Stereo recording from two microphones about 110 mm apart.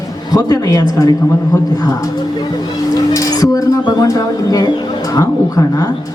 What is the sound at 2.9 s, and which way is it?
Speech, 35° left (ahead or behind).